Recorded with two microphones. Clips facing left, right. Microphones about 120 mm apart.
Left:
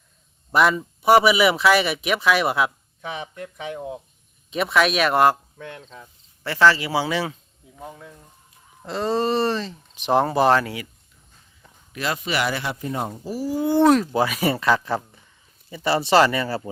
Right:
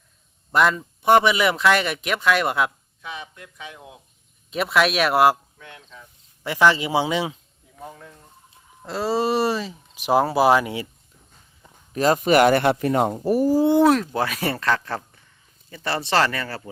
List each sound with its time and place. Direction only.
0.5 s speech: 5° left (ahead or behind)
3.4 s speech: 35° left (ahead or behind)
4.5 s speech: centre (ahead or behind)
5.5 s speech: 40° left (ahead or behind)
6.4 s speech: 15° right (ahead or behind)
7.8 s speech: 5° left (ahead or behind)
11.6 s a sound: 15° right (ahead or behind)
11.9 s speech: 40° right (ahead or behind); by 13.5 s 60° right (ahead or behind)
13.8 s speech: 5° left (ahead or behind)